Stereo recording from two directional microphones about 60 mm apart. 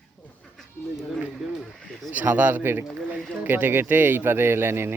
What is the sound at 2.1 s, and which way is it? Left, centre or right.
Speech, right.